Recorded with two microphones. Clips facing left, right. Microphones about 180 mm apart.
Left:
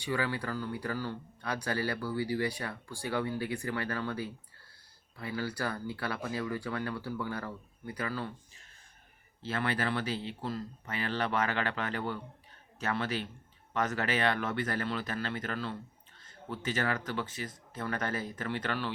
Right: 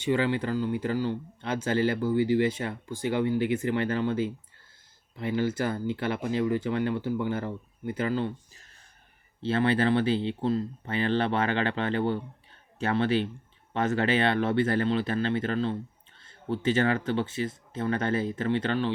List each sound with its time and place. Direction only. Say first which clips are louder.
0.0 s speech: right 7 dB; 20° right (ahead or behind)
9.4 s speech: right 8 dB; 30° right (ahead or behind)